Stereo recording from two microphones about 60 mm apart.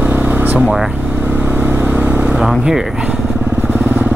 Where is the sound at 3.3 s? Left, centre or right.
Right.